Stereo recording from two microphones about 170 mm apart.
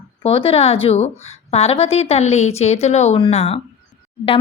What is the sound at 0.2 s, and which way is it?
A woman's voice, 35° left (ahead or behind).